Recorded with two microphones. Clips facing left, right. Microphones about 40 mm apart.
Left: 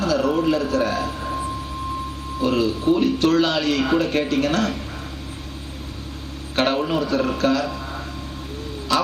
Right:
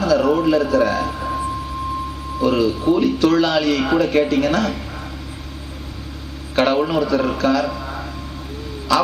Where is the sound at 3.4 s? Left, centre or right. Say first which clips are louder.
Right 3 dB; right.